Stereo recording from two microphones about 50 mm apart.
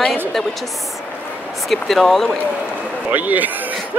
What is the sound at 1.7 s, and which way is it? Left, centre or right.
Speech, centre.